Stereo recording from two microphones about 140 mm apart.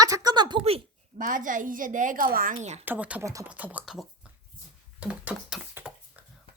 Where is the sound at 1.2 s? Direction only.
70° right (ahead or behind).